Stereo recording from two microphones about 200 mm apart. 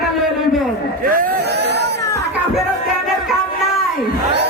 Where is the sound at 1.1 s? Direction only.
45° right (ahead or behind).